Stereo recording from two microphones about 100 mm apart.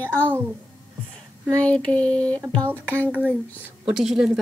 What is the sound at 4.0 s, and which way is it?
Speech, 5° right (ahead or behind).